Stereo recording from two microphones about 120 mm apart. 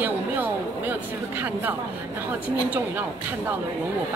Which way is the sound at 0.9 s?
15° right (ahead or behind).